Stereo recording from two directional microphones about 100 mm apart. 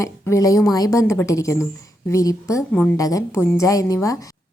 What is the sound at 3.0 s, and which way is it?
A woman's voice, 35° left (ahead or behind).